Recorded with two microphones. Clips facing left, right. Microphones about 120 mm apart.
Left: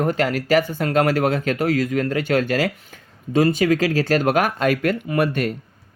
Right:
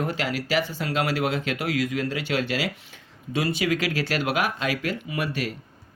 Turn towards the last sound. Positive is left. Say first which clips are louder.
# left 8 dB
turn(degrees=50)  # may be behind; listen again after turning